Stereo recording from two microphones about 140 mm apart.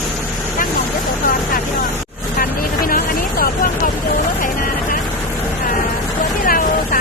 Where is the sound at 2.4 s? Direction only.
90° left.